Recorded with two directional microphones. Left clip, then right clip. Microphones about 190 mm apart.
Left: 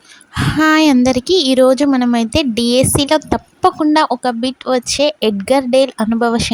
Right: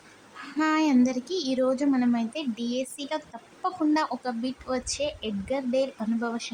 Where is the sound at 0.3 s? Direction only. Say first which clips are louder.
Left 14 dB; 50° left (ahead or behind).